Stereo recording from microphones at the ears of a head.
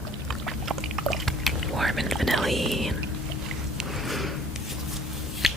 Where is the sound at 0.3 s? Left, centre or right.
Right.